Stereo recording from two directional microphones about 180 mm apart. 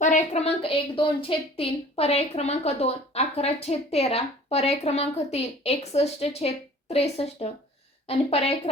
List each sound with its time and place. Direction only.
0.0 s a woman's voice: 40° left (ahead or behind)